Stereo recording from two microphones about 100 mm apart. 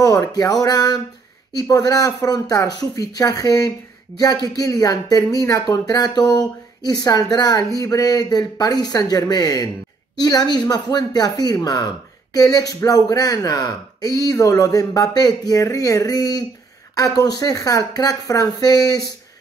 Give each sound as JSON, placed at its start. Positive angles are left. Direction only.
{"t": 0.0, "sound": "speech", "side_deg": 35}